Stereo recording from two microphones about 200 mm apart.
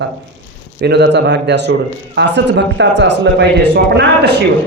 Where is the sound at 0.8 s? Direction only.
55° right (ahead or behind).